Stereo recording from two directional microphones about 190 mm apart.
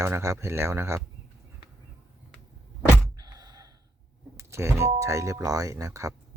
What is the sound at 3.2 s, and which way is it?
Sigh, 20° right (ahead or behind).